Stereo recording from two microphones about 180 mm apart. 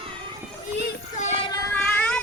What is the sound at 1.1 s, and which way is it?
Child singing, 35° left (ahead or behind).